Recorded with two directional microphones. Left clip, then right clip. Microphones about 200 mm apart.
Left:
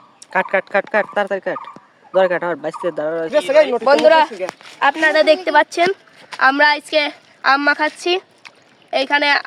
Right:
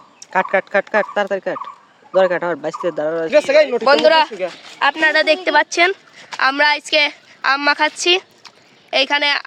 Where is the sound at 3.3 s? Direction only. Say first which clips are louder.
Right 1 dB; 40° right (ahead or behind).